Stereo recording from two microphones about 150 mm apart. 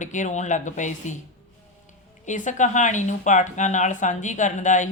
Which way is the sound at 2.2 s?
55° left (ahead or behind).